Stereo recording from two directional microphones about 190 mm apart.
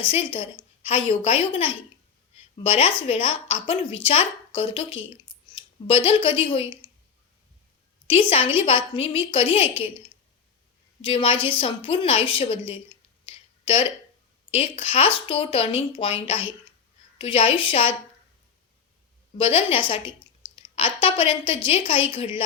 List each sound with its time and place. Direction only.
0.0 s a woman's voice: 30° left (ahead or behind)
8.0 s a woman's voice: 30° left (ahead or behind)
19.4 s speech: 30° left (ahead or behind)